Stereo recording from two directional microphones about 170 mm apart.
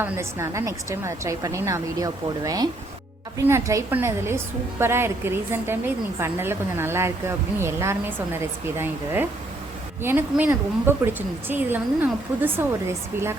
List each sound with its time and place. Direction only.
0.0 s a woman's voice: 15° right (ahead or behind)